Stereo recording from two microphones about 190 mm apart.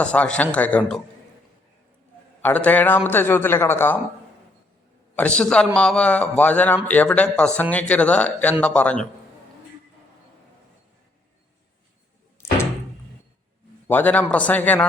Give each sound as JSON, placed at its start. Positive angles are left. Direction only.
{"t": 0.0, "sound": "speech", "side_deg": 5}
{"t": 2.4, "sound": "speech", "side_deg": 10}
{"t": 5.1, "sound": "speech", "side_deg": 5}
{"t": 12.4, "sound": "door", "side_deg": 15}
{"t": 13.8, "sound": "speech", "side_deg": 10}